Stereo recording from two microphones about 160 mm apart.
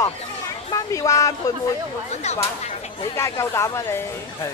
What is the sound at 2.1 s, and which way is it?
Speech, 45° left (ahead or behind).